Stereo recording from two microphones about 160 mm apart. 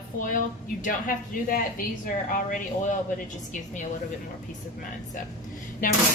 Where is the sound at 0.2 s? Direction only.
55° left (ahead or behind).